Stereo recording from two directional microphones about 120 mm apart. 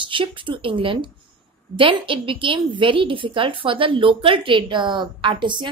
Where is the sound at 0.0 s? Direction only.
45° right (ahead or behind).